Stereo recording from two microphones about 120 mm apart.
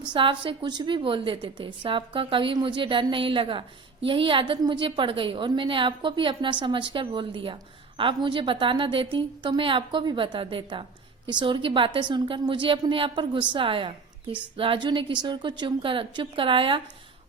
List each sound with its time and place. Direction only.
0.1 s a woman's voice: 45° right (ahead or behind)